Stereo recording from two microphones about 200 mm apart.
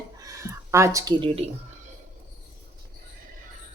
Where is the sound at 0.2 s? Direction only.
15° right (ahead or behind).